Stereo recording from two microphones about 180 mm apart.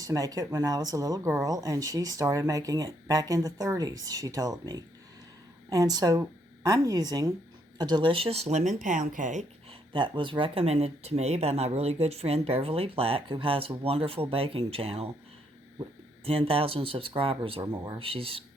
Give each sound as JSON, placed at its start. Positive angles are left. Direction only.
{"t": 0.0, "sound": "speech", "side_deg": -20}
{"t": 9.9, "sound": "speech", "side_deg": -25}
{"t": 16.2, "sound": "speech", "side_deg": -30}